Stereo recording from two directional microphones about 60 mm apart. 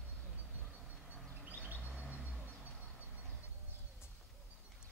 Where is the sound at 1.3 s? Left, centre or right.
Right.